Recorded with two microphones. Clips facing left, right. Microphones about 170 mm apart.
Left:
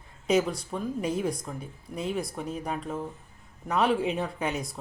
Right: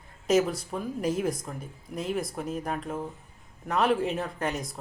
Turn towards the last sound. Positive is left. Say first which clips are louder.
# left 1 dB
turn(degrees=0)  # may be behind; listen again after turning